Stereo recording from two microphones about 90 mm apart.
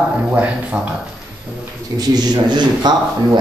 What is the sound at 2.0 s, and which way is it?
Speech, 50° right (ahead or behind).